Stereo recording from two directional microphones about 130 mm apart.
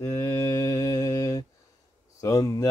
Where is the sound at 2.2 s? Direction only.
25° left (ahead or behind).